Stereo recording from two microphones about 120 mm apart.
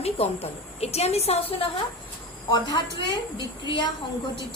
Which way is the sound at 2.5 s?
40° left (ahead or behind).